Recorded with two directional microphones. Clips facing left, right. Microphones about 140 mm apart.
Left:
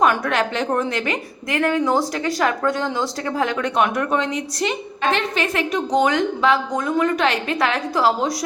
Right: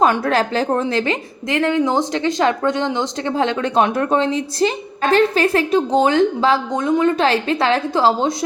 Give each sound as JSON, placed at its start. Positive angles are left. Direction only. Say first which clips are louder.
{"t": 0.0, "sound": "a woman's voice", "louder": "right 2 dB", "side_deg": -30}